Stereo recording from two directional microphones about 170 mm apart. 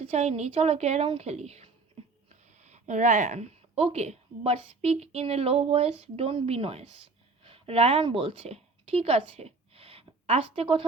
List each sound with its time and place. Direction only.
0.0 s a woman's voice: 35° right (ahead or behind)